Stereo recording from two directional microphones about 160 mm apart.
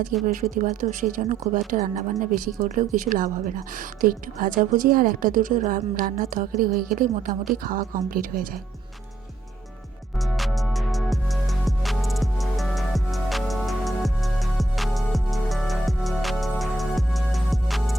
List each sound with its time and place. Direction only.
0.5 s speech: 60° right (ahead or behind)
10.2 s music: centre (ahead or behind)